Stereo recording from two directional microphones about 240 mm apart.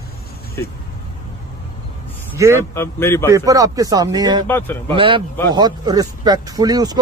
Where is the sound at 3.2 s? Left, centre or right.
Centre.